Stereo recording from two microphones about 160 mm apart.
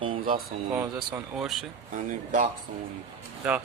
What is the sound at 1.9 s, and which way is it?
Speech, 50° right (ahead or behind).